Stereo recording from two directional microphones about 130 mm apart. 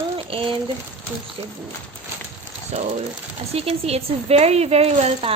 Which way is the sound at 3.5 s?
50° right (ahead or behind).